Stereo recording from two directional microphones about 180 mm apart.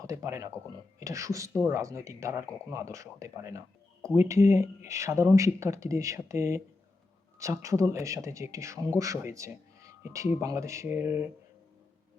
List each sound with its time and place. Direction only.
0.0 s speech: 15° right (ahead or behind)